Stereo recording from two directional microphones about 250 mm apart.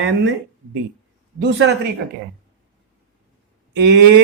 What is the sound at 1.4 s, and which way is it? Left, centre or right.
Speech, right.